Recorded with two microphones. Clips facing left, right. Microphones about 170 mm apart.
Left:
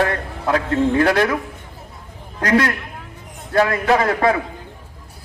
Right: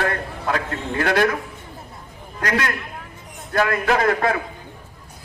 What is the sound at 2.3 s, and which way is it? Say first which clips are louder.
Speech: left 6 dB; 35° left (ahead or behind).